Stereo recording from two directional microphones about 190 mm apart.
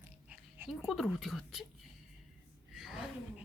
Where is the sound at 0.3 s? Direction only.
5° right (ahead or behind).